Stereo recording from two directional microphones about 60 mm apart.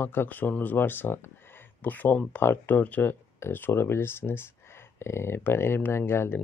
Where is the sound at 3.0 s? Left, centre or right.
Left.